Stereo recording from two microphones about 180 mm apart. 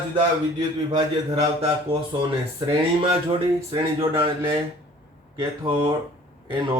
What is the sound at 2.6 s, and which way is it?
Speech, 25° right (ahead or behind).